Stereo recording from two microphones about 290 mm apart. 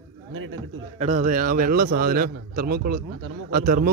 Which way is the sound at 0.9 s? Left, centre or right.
Right.